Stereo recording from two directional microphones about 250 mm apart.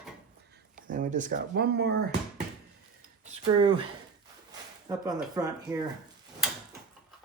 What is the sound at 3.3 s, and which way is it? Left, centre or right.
Speech, right.